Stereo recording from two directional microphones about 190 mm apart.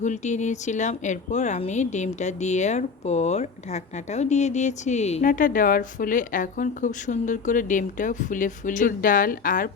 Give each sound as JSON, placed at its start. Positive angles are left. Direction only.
{"t": 0.0, "sound": "speech", "side_deg": 40}